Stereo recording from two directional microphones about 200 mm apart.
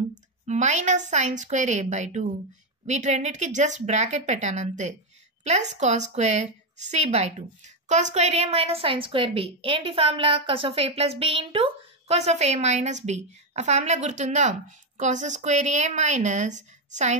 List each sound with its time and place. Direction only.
0.1 s a woman's voice: 35° right (ahead or behind)